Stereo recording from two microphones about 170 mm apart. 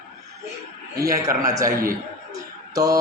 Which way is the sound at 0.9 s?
20° right (ahead or behind).